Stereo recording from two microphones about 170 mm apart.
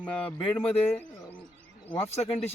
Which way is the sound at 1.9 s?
35° left (ahead or behind).